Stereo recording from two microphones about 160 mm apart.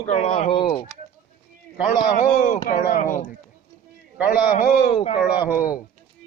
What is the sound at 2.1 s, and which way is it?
Speech, 55° left (ahead or behind).